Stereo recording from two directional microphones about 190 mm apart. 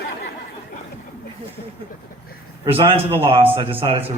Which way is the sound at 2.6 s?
30° right (ahead or behind).